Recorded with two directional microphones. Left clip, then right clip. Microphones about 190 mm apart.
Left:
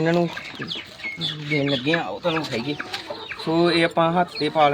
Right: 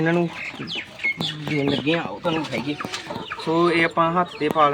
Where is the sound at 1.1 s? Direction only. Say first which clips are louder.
Left 1 dB; 15° left (ahead or behind).